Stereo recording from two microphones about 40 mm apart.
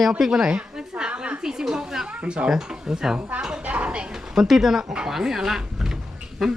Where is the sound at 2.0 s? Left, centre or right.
Right.